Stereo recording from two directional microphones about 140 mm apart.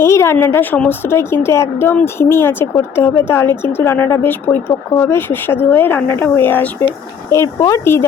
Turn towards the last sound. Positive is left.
turn(degrees=20)  # may be behind; listen again after turning